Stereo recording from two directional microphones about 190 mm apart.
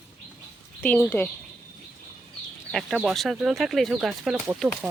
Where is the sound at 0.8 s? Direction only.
10° left (ahead or behind).